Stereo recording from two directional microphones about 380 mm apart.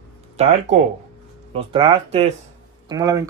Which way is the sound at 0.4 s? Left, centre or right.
Centre.